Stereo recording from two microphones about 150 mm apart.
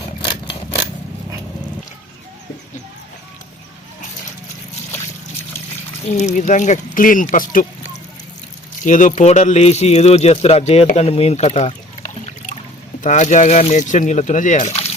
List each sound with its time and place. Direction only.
6.1 s speech: 50° left (ahead or behind)
8.8 s speech: 55° left (ahead or behind)
10.9 s a sound: 45° left (ahead or behind)
13.0 s speech: 55° left (ahead or behind)